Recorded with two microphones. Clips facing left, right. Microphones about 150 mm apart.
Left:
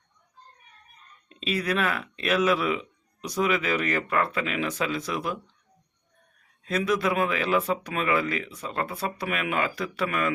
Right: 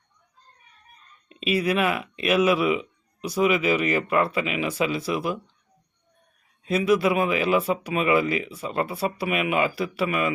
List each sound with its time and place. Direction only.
1.3 s speech: 10° right (ahead or behind)
6.7 s speech: 10° right (ahead or behind)